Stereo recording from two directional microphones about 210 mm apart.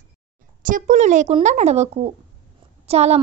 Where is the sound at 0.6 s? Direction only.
35° right (ahead or behind).